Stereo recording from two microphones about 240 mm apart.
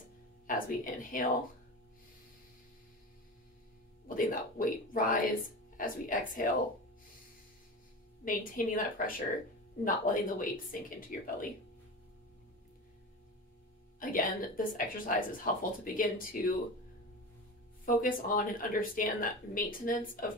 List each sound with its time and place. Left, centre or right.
0.5 s a woman's voice: left
4.1 s a woman's voice: left
8.3 s a woman's voice: left
13.9 s a woman's voice: left
17.8 s a woman's voice: left